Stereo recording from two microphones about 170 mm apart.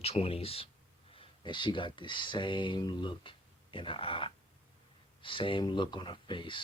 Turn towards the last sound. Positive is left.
turn(degrees=30)  # may be behind; listen again after turning